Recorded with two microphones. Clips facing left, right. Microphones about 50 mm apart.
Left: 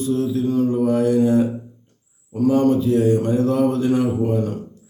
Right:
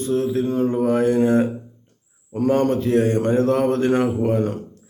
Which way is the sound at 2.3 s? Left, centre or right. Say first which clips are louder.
Left 2 dB; right.